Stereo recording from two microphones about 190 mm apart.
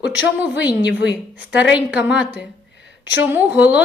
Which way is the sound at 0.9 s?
65° left (ahead or behind).